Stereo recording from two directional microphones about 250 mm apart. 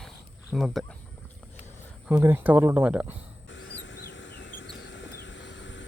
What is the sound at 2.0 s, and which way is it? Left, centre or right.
Speech, centre.